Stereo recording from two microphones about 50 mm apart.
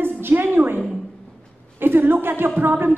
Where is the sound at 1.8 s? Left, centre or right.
Right.